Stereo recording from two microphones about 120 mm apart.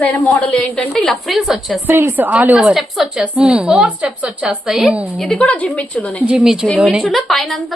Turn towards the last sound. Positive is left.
turn(degrees=0)  # may be behind; listen again after turning